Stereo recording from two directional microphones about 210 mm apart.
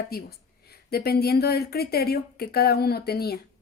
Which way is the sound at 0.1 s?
45° left (ahead or behind).